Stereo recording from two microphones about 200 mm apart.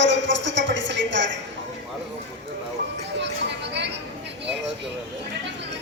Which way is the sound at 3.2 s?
60° right (ahead or behind).